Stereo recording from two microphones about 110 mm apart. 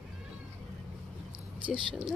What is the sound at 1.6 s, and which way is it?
Speech, 50° right (ahead or behind).